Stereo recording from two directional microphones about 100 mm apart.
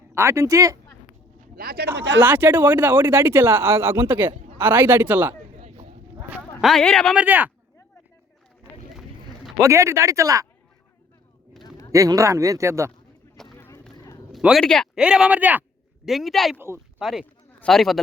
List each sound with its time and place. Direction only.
0.1 s speech: 25° right (ahead or behind)
1.9 s speech: 20° right (ahead or behind)
5.5 s a sound: 90° right
6.3 s speech: centre (ahead or behind)
7.2 s speech: 20° right (ahead or behind)
9.0 s a sound: centre (ahead or behind)
9.6 s speech: 30° right (ahead or behind)
11.9 s speech: 35° right (ahead or behind)
13.6 s a sound: 25° left (ahead or behind)
14.6 s speech: 5° left (ahead or behind)
14.9 s speech: 10° right (ahead or behind)
16.0 s speech: centre (ahead or behind)